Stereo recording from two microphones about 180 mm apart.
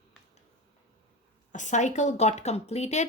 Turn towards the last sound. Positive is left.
turn(degrees=35)  # may be behind; listen again after turning